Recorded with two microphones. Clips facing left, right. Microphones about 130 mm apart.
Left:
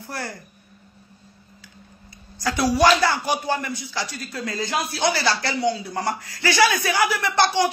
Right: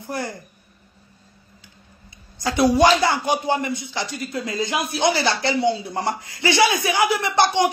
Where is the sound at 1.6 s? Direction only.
20° right (ahead or behind).